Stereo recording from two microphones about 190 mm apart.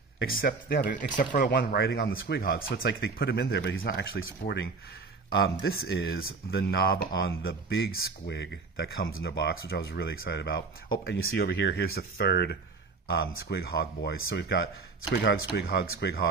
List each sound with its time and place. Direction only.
0.2 s speech: 60° left (ahead or behind)
0.9 s speech: 45° left (ahead or behind)
1.5 s speech: 60° left (ahead or behind)